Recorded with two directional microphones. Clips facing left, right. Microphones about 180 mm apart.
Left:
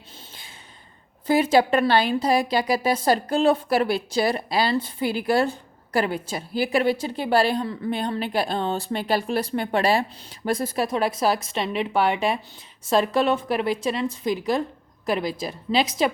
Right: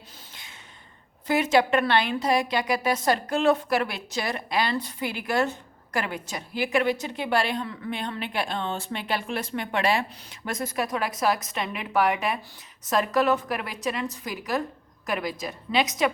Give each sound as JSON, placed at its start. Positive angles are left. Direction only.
{"t": 1.3, "sound": "a woman's voice", "side_deg": 30}